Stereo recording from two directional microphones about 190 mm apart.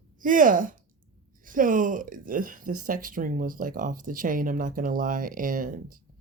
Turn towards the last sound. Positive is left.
turn(degrees=-45)  # may be behind; listen again after turning